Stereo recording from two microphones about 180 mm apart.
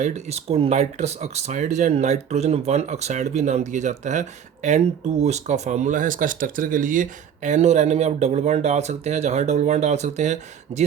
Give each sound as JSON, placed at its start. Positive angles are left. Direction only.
{"t": 0.0, "sound": "speech", "side_deg": -35}